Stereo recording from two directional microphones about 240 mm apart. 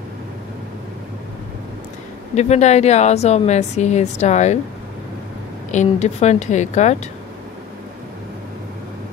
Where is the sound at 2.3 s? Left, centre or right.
Left.